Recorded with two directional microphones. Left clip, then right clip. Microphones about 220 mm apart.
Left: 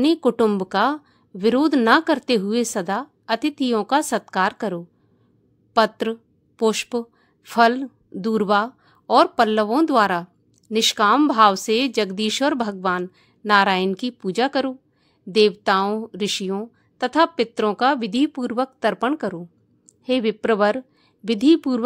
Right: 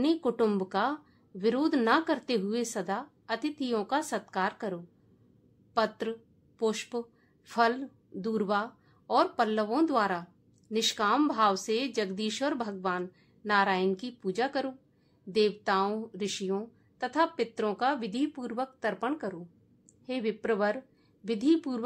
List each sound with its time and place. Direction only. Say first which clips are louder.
0.0 s a woman's voice: left 9 dB; 35° left (ahead or behind)